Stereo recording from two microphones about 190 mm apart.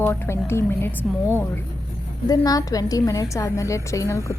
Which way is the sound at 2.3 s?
20° left (ahead or behind).